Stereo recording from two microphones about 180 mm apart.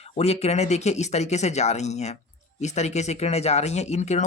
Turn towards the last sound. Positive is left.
turn(degrees=40)  # may be behind; listen again after turning